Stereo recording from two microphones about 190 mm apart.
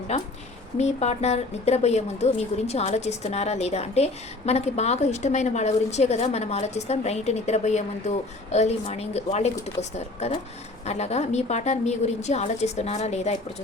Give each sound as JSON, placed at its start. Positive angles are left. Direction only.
{"t": 0.1, "sound": "a woman's voice", "side_deg": 35}